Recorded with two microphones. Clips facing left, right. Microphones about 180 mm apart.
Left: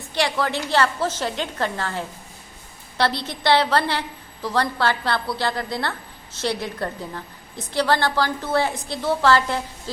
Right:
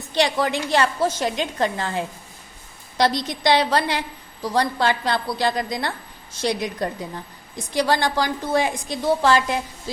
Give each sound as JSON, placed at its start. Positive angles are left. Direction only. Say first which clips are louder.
{"t": 0.2, "sound": "a woman's voice", "louder": "right 2 dB", "side_deg": -15}